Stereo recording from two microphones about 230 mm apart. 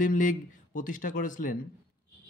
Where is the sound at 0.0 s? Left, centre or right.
Left.